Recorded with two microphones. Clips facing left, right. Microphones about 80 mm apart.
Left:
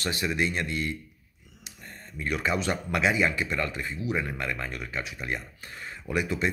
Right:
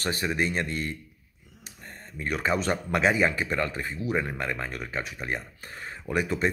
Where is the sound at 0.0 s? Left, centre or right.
Right.